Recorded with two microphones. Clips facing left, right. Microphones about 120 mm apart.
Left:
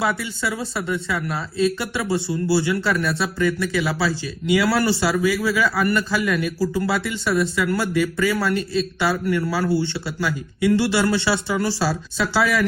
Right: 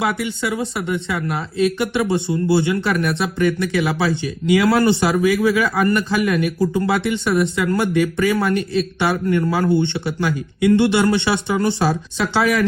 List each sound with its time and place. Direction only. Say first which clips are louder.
0.0 s speech: right 2 dB; 20° right (ahead or behind)
8.5 s speech: right 3 dB; 25° left (ahead or behind)
9.0 s speech: right 3 dB; 25° right (ahead or behind)